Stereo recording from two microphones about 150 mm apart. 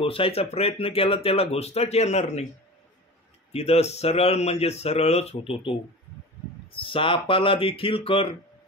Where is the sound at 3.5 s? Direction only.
45° left (ahead or behind).